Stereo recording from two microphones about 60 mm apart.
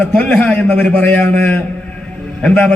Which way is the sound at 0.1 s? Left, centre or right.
Left.